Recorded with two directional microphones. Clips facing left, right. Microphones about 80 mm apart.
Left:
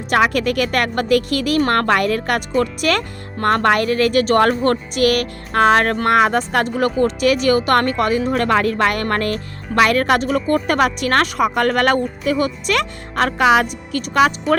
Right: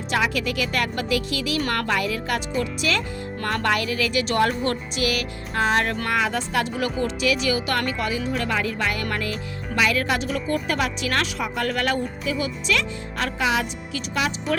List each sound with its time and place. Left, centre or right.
0.1 s speech: left